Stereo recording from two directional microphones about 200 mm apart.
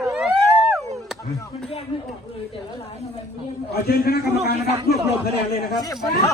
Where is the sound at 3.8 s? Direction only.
50° left (ahead or behind).